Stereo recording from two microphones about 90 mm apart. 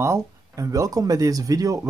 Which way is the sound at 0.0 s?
35° right (ahead or behind).